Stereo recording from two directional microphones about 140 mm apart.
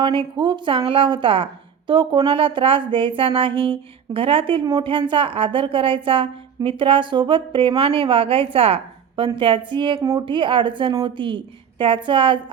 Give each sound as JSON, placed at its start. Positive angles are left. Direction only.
{"t": 0.0, "sound": "a woman's voice", "side_deg": -35}